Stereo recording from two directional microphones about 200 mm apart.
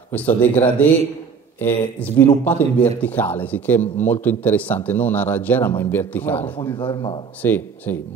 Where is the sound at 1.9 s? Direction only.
10° left (ahead or behind).